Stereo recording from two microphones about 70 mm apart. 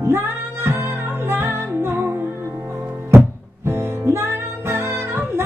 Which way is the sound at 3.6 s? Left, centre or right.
Right.